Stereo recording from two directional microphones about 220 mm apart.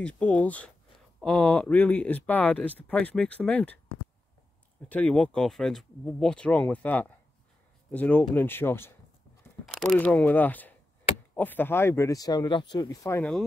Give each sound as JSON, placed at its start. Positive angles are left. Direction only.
{"t": 0.0, "sound": "speech", "side_deg": 5}
{"t": 4.8, "sound": "speech", "side_deg": 5}